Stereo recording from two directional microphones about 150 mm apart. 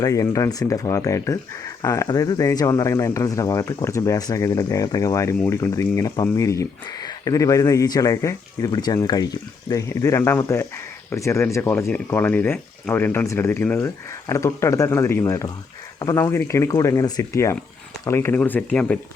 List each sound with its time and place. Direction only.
0.0 s speech: 20° left (ahead or behind)